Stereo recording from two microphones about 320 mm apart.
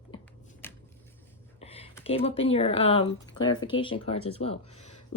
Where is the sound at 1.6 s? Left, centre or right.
Centre.